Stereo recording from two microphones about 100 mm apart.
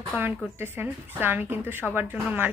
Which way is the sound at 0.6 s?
20° right (ahead or behind).